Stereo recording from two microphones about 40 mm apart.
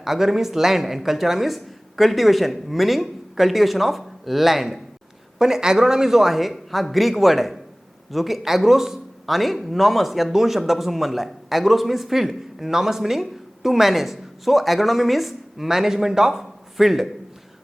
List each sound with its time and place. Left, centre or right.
0.0 s speech: centre